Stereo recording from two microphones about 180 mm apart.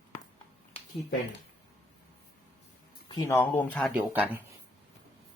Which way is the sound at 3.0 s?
20° left (ahead or behind).